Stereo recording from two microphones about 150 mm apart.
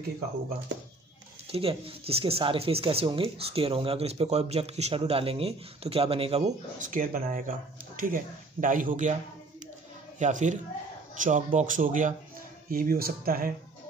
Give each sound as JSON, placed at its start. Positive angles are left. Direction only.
{"t": 1.5, "sound": "speech", "side_deg": -40}
{"t": 6.8, "sound": "speech", "side_deg": -65}
{"t": 10.1, "sound": "speech", "side_deg": -55}
{"t": 12.6, "sound": "speech", "side_deg": -70}